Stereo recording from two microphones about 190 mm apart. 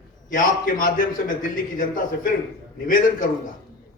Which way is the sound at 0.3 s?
45° left (ahead or behind).